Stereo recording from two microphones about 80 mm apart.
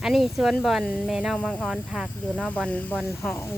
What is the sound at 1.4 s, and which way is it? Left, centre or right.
Speech, centre.